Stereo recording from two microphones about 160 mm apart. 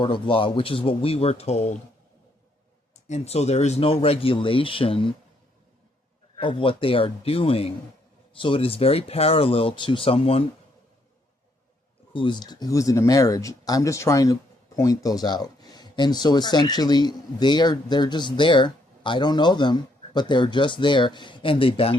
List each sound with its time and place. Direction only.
0.0 s speech: 30° left (ahead or behind)
3.1 s speech: 40° left (ahead or behind)
6.4 s speech: 30° left (ahead or behind)
12.1 s speech: 30° left (ahead or behind)